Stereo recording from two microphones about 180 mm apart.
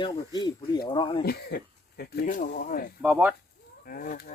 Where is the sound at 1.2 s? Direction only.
60° left (ahead or behind).